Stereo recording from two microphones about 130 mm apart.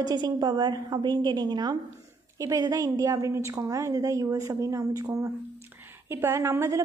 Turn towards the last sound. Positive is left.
turn(degrees=-20)  # may be behind; listen again after turning